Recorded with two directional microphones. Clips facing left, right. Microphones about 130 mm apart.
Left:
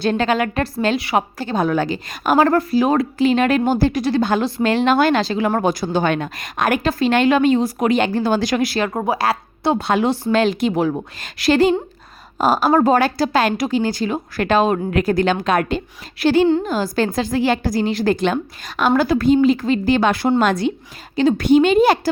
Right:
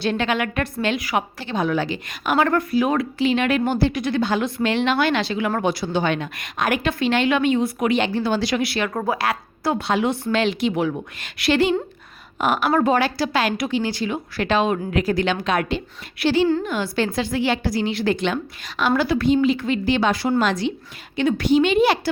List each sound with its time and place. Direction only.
0.0 s a woman's voice: 40° left (ahead or behind)
8.9 s a woman's voice: 25° left (ahead or behind)
9.1 s a woman's voice: 35° left (ahead or behind)
9.8 s a woman's voice: 50° left (ahead or behind)
10.1 s a woman's voice: 40° left (ahead or behind)
21.2 s a woman's voice: 35° left (ahead or behind)
21.4 s a woman's voice: 50° left (ahead or behind)